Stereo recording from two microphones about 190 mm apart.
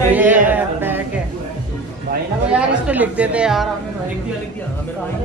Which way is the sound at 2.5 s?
5° right (ahead or behind).